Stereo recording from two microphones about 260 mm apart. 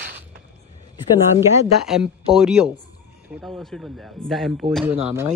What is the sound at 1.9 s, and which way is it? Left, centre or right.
A man's voice, centre.